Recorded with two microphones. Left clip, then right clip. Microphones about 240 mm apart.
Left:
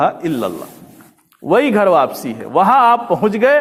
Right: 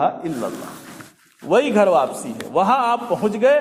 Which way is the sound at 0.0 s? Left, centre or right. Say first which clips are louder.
Left 5 dB; left.